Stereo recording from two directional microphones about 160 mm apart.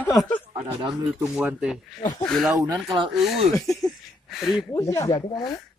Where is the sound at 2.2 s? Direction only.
Centre (ahead or behind).